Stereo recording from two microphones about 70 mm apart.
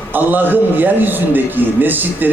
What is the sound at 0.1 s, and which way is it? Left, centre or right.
A man's voice, right.